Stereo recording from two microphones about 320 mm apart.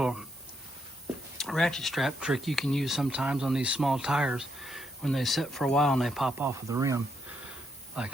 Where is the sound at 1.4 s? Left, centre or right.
Centre.